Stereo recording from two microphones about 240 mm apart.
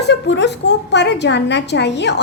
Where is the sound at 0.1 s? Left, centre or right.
Left.